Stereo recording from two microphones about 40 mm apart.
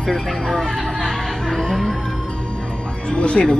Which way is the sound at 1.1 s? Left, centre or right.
Centre.